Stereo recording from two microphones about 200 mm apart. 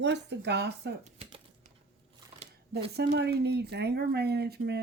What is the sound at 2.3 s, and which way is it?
Shuffling cards, 25° right (ahead or behind).